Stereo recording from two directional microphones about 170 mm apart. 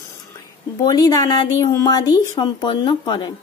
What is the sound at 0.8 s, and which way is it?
Speech, 20° left (ahead or behind).